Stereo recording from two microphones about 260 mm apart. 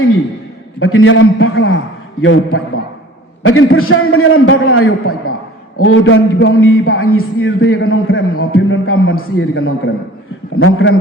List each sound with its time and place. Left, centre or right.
0.8 s a man's voice: left